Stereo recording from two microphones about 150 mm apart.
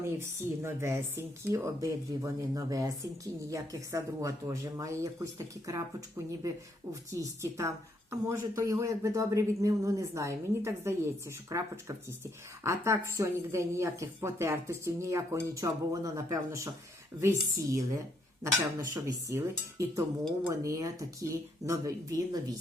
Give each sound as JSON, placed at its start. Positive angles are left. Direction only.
{"t": 0.0, "sound": "speech", "side_deg": -15}